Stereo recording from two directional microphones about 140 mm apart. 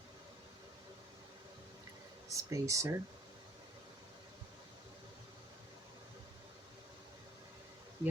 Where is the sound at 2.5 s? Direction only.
20° right (ahead or behind).